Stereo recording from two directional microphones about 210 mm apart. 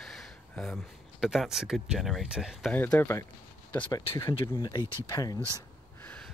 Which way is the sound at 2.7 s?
10° left (ahead or behind).